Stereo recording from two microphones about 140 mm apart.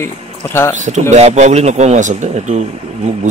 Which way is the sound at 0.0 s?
20° left (ahead or behind).